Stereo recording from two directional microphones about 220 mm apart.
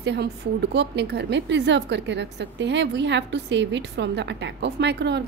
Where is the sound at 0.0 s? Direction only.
50° right (ahead or behind).